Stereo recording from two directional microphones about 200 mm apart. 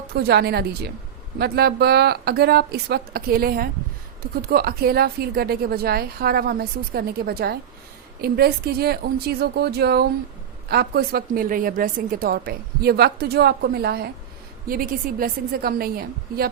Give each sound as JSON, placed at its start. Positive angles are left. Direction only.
{"t": 0.1, "sound": "a woman's voice", "side_deg": -55}